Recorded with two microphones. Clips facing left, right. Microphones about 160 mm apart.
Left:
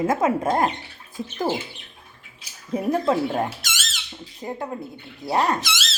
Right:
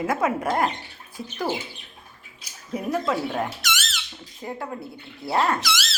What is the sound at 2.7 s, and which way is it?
Speech, 30° left (ahead or behind).